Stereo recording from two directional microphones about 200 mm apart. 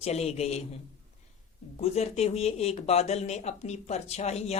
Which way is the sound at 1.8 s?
30° left (ahead or behind).